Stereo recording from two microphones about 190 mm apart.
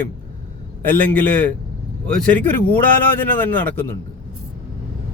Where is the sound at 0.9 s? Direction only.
10° left (ahead or behind).